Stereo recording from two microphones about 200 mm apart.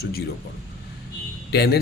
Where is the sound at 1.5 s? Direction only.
50° left (ahead or behind).